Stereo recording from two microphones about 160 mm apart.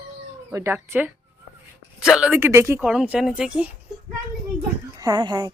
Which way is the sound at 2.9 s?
5° right (ahead or behind).